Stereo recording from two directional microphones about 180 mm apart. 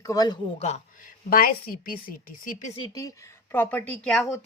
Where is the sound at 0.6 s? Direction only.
45° left (ahead or behind).